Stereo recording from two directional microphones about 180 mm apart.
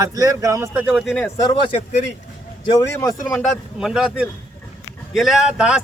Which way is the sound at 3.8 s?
5° right (ahead or behind).